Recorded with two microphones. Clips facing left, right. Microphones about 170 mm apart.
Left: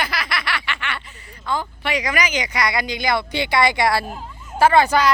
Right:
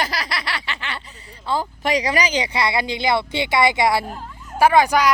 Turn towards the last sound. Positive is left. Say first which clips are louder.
# even
turn(degrees=-10)  # may be behind; listen again after turning